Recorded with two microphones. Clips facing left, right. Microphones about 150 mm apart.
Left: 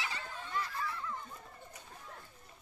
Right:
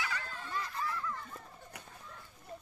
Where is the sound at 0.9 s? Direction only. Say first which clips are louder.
Right 2 dB; 20° left (ahead or behind).